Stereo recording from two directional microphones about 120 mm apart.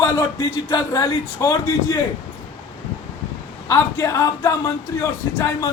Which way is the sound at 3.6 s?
25° left (ahead or behind).